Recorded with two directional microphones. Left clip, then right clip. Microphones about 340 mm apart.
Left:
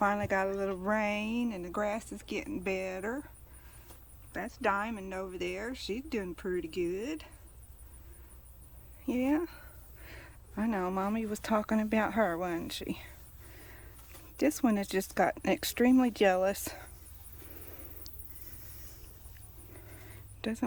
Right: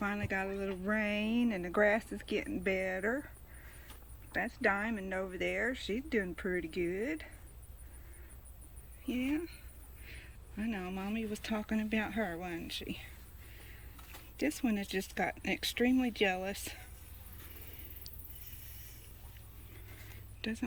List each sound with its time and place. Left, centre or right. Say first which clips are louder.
0.0 s a woman's voice: left 7 dB; centre
4.3 s a woman's voice: left 1 dB; centre
9.0 s speech: left 5 dB; left
9.3 s speech: left 6 dB; centre
14.3 s speech: left 6 dB; centre
20.4 s speech: left 4 dB; centre